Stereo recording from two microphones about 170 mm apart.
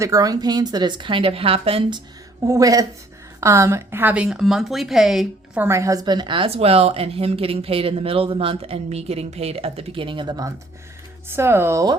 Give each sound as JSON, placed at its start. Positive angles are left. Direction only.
{"t": 0.0, "sound": "a woman's voice", "side_deg": -20}
{"t": 2.4, "sound": "a woman's voice", "side_deg": -20}
{"t": 5.6, "sound": "speech", "side_deg": -15}